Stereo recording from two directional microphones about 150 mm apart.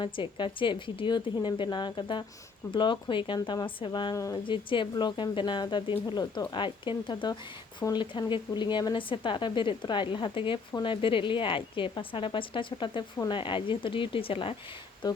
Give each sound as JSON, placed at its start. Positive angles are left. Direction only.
{"t": 0.0, "sound": "speech", "side_deg": 30}
{"t": 4.4, "sound": "speech", "side_deg": 35}